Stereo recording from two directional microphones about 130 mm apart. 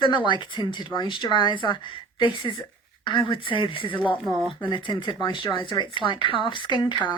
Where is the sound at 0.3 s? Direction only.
35° left (ahead or behind).